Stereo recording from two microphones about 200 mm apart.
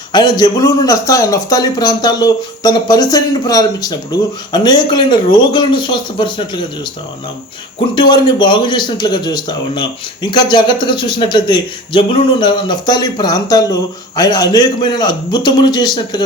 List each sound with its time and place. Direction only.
0.1 s a man's voice: 20° left (ahead or behind)
7.9 s a man's voice: 25° left (ahead or behind)